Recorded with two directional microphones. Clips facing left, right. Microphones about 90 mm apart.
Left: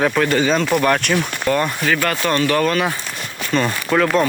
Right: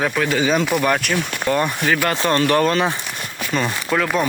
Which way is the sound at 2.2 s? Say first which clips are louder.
Right 2 dB; 25° right (ahead or behind).